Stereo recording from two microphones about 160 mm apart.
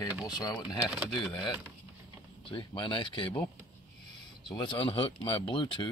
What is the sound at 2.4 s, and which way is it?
Speech, 30° left (ahead or behind).